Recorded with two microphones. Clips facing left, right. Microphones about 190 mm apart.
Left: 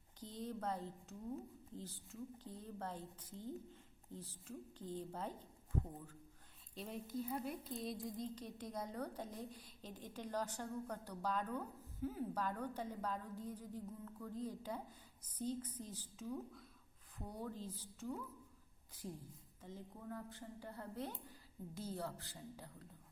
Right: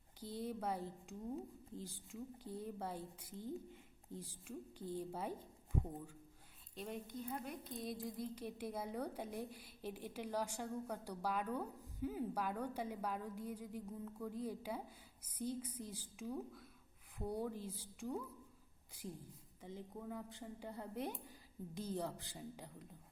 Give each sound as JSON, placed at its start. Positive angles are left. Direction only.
{"t": 0.2, "sound": "a woman's voice", "side_deg": -10}
{"t": 6.7, "sound": "a woman's voice", "side_deg": 0}
{"t": 19.6, "sound": "a woman's voice", "side_deg": -15}